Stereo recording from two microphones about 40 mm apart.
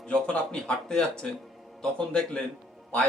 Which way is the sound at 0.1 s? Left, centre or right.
Left.